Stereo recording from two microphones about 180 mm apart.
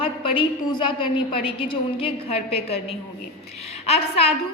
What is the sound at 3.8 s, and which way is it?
Speech, 35° left (ahead or behind).